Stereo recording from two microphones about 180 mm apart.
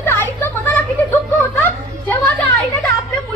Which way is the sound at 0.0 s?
10° left (ahead or behind).